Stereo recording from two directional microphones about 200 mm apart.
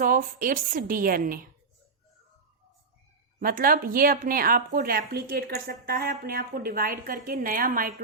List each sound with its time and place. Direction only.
0.0 s speech: 45° right (ahead or behind)
3.4 s speech: 45° right (ahead or behind)